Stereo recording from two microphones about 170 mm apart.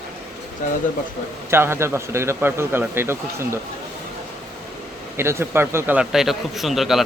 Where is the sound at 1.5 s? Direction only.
15° right (ahead or behind).